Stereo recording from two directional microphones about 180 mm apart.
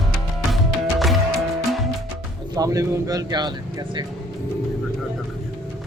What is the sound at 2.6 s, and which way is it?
Speech, 20° right (ahead or behind).